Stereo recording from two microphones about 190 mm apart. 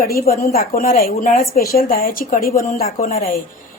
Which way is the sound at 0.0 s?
50° left (ahead or behind).